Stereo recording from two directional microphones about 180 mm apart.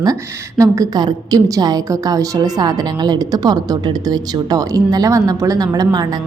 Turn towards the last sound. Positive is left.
turn(degrees=-20)  # may be behind; listen again after turning